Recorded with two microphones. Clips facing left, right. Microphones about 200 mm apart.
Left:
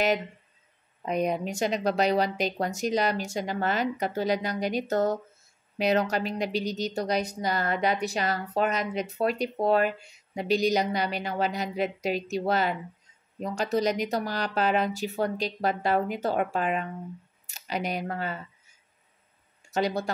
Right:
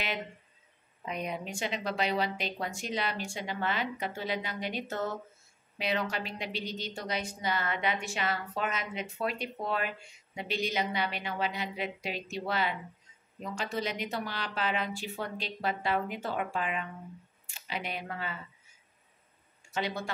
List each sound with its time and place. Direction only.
1.0 s speech: 40° left (ahead or behind)
19.7 s speech: 40° left (ahead or behind)